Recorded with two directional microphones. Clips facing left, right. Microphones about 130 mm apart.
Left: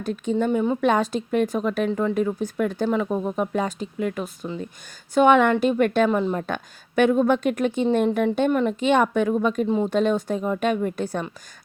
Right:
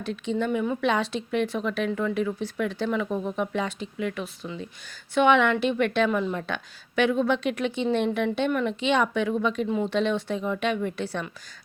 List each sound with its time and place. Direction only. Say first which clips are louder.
0.0 s a woman's voice: left 4 dB; 45° left (ahead or behind)
0.8 s speech: left 4 dB; 45° left (ahead or behind)